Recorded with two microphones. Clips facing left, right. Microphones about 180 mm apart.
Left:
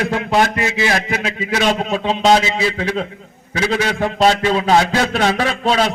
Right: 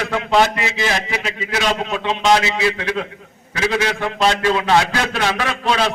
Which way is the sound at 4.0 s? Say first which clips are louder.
Left 4 dB; 35° left (ahead or behind).